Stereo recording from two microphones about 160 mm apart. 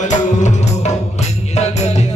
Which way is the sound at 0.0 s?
50° left (ahead or behind).